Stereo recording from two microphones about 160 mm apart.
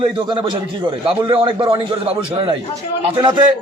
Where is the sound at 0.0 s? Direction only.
30° right (ahead or behind).